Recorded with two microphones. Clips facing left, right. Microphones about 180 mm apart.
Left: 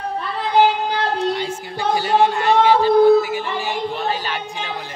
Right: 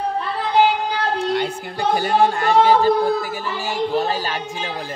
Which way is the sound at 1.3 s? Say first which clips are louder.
Right 2 dB; 55° right (ahead or behind).